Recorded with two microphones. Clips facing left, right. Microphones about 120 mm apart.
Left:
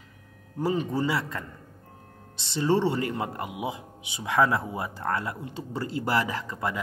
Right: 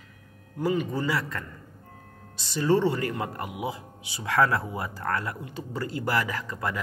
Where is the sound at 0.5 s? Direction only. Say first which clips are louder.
Even; 30° left (ahead or behind).